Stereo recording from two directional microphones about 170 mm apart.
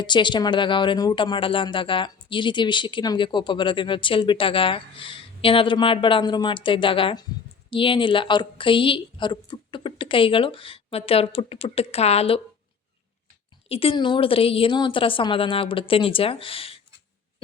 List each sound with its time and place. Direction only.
0.0 s a woman's voice: 25° left (ahead or behind)
13.7 s a woman's voice: 35° left (ahead or behind)